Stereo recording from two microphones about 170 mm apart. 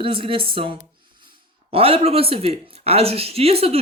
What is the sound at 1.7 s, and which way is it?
Speech, 35° right (ahead or behind).